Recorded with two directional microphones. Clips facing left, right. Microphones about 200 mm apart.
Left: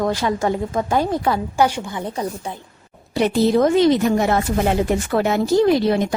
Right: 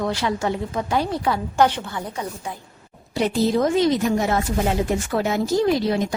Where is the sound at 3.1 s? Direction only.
65° left (ahead or behind).